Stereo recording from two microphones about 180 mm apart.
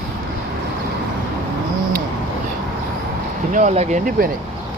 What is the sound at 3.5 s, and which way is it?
Speech, 40° right (ahead or behind).